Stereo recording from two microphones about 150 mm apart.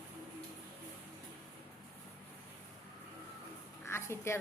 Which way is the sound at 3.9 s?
15° left (ahead or behind).